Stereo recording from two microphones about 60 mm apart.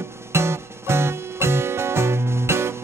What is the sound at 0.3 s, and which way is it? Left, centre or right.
Music, right.